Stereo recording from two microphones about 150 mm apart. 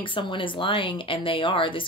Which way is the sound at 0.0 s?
35° left (ahead or behind).